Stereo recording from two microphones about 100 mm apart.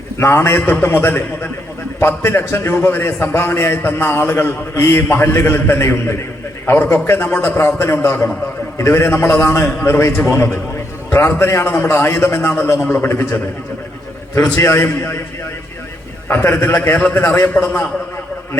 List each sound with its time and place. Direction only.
0.2 s a man's voice: 25° left (ahead or behind)
16.3 s a man's voice: 25° left (ahead or behind)